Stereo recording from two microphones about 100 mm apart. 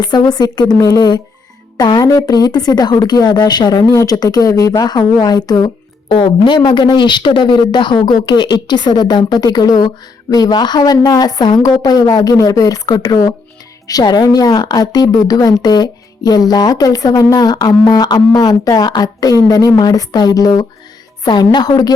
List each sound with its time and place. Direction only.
0.0 s a woman's voice: 45° left (ahead or behind)